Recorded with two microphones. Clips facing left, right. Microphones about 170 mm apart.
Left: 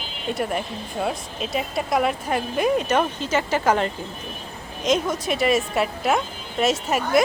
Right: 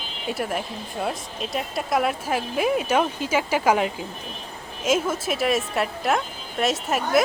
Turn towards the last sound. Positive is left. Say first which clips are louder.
# left 2 dB
turn(degrees=0)  # may be behind; listen again after turning